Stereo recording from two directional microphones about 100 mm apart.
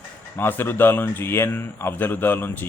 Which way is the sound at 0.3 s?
20° left (ahead or behind).